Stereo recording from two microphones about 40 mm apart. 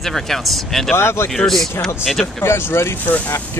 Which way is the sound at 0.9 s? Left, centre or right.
Left.